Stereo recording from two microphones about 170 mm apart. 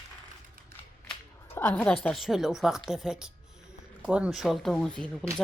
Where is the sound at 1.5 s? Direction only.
10° left (ahead or behind).